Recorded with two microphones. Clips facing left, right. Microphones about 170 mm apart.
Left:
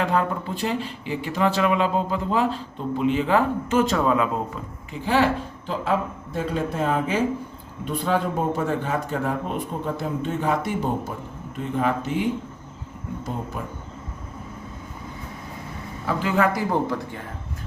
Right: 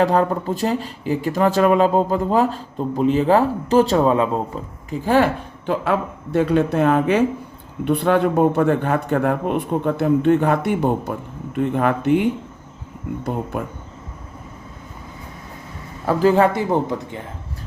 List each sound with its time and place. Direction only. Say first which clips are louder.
0.0 s speech: right 6 dB; 40° right (ahead or behind)
5.0 s speech: right 4 dB; 50° right (ahead or behind)
16.0 s a man's voice: right 7 dB; 35° right (ahead or behind)